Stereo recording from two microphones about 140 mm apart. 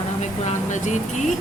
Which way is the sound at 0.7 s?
60° left (ahead or behind).